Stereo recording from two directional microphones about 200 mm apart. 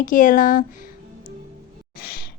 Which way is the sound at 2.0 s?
50° left (ahead or behind).